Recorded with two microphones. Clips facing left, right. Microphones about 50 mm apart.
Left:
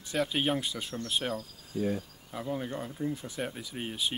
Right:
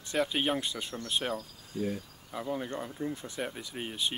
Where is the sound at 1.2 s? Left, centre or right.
Centre.